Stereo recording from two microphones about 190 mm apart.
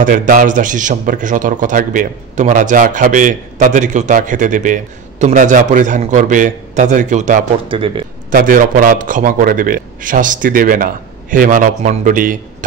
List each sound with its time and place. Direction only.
0.0 s a man's voice: 45° right (ahead or behind)
7.6 s speech: 25° right (ahead or behind)
8.3 s a man's voice: 45° right (ahead or behind)